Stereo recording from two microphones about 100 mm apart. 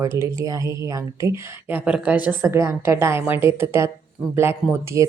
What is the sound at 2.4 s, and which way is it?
Speech, 30° right (ahead or behind).